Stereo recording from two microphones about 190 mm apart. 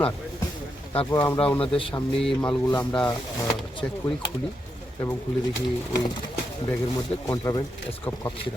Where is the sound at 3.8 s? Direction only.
10° left (ahead or behind).